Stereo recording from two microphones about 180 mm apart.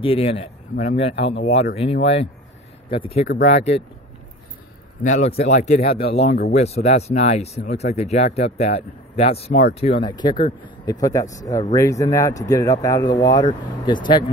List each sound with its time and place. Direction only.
0.0 s speech: 30° left (ahead or behind)
5.0 s speech: 40° left (ahead or behind)